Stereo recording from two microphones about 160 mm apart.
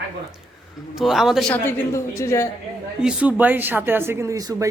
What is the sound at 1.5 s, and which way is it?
Speech, 15° left (ahead or behind).